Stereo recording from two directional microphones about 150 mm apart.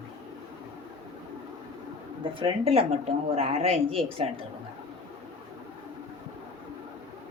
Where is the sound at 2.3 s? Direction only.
35° right (ahead or behind).